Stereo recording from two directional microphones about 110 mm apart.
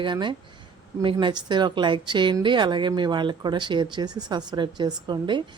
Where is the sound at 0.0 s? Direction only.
45° right (ahead or behind).